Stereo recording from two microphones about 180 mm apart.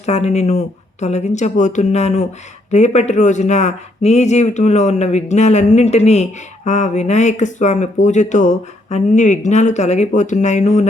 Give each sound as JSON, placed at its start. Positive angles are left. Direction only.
{"t": 0.0, "sound": "speech", "side_deg": 35}